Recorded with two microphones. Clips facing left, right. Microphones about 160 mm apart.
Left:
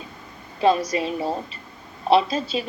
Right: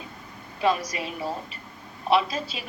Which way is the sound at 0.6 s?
30° left (ahead or behind).